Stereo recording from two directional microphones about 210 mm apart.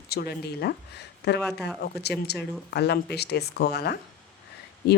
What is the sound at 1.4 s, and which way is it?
Speech, 5° left (ahead or behind).